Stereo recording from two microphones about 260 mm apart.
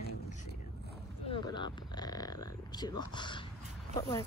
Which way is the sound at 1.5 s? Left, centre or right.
Centre.